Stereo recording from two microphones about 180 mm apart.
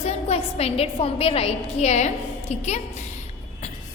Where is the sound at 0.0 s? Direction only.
35° left (ahead or behind).